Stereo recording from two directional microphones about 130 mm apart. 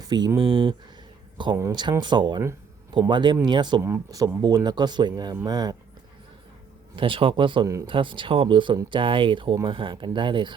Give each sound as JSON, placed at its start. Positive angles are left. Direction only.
{"t": 0.0, "sound": "speech", "side_deg": -30}
{"t": 3.8, "sound": "speech", "side_deg": -20}
{"t": 6.9, "sound": "speech", "side_deg": -40}